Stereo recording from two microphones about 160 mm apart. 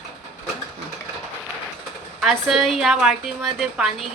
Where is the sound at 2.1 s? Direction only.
Centre (ahead or behind).